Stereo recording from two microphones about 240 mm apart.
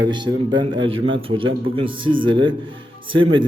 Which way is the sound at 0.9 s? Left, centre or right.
Right.